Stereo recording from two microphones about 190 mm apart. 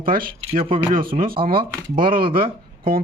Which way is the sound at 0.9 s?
45° right (ahead or behind).